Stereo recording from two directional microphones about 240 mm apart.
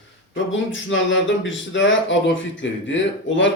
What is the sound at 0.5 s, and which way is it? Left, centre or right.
Speech, left.